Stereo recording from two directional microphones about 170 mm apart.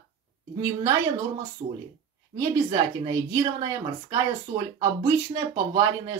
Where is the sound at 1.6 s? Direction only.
30° right (ahead or behind).